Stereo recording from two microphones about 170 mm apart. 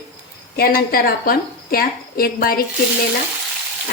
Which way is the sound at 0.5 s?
60° left (ahead or behind).